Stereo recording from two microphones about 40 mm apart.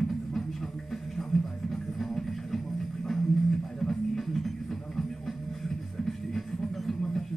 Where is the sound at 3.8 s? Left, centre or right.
Centre.